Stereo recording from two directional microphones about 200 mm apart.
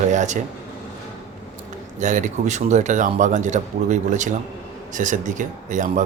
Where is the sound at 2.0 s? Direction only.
40° right (ahead or behind).